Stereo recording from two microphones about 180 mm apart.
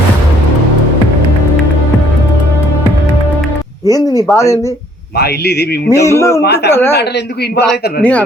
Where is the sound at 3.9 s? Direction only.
20° left (ahead or behind).